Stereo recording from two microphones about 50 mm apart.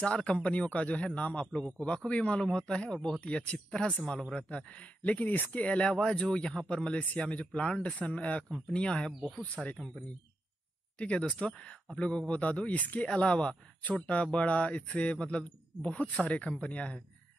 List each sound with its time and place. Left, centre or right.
0.0 s a man's voice: left
5.6 s a man's voice: left
9.6 s speech: centre
11.0 s a man's voice: left